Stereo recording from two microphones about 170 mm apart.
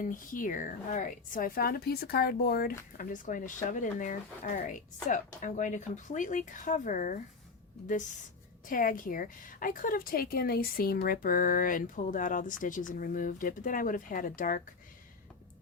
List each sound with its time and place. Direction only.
0.0 s a woman's voice: 50° left (ahead or behind)
8.6 s a woman's voice: 55° left (ahead or behind)